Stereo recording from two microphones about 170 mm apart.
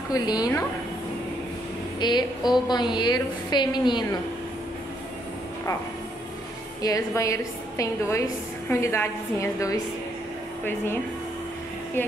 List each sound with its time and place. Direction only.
0.1 s a woman's voice: 25° left (ahead or behind)
2.0 s a woman's voice: 25° left (ahead or behind)
6.8 s a woman's voice: 20° left (ahead or behind)